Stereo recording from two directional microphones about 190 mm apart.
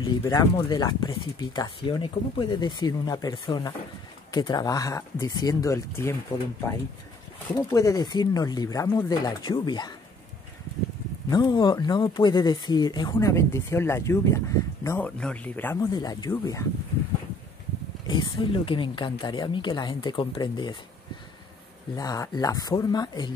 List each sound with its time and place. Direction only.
0.0 s speech: 15° left (ahead or behind)
7.5 s speech: 15° left (ahead or behind)
11.2 s speech: 20° left (ahead or behind)
18.0 s speech: 25° left (ahead or behind)
21.9 s speech: 20° left (ahead or behind)